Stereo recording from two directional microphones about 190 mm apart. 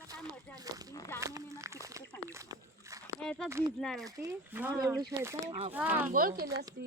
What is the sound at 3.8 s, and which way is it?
Speech, centre (ahead or behind).